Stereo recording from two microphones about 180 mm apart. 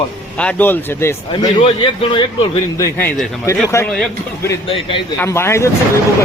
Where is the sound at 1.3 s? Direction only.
25° left (ahead or behind).